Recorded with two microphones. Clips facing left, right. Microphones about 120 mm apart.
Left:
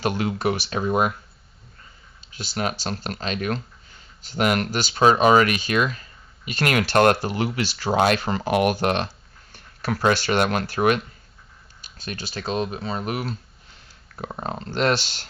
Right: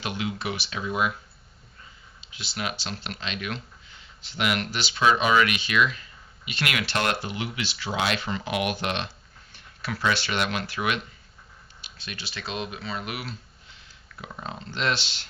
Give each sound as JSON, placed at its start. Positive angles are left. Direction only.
{"t": 0.0, "sound": "speech", "side_deg": 45}
{"t": 2.3, "sound": "speech", "side_deg": 45}